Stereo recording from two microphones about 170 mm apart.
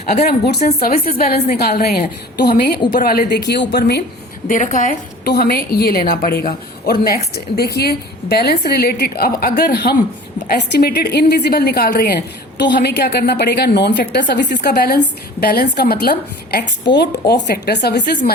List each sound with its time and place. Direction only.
0.3 s a woman's voice: 70° left (ahead or behind)
0.8 s a woman's voice: 60° left (ahead or behind)
3.0 s a woman's voice: 65° left (ahead or behind)
4.4 s a woman's voice: 50° left (ahead or behind)
5.2 s a woman's voice: 65° left (ahead or behind)